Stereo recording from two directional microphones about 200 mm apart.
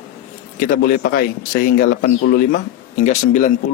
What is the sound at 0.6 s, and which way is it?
Speech, 50° left (ahead or behind).